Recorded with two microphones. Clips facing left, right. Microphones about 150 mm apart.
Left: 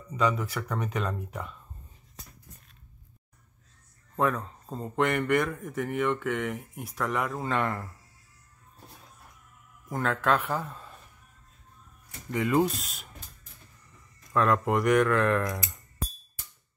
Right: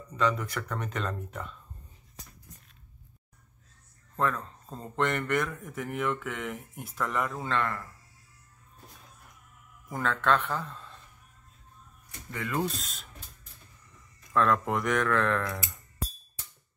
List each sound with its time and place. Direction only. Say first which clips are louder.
0.1 s speech: left 1 dB; 10° left (ahead or behind)
4.2 s speech: left 3 dB; 5° left (ahead or behind)
7.5 s speech: left 1 dB; 15° left (ahead or behind)
9.8 s speech: left 1 dB; centre (ahead or behind)
12.3 s speech: left 7 dB; 20° left (ahead or behind)
12.8 s speech: left 1 dB; centre (ahead or behind)
14.3 s speech: left 1 dB; 5° left (ahead or behind)